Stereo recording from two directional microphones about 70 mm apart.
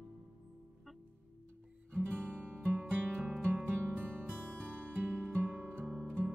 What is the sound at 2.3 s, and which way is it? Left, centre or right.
Music, right.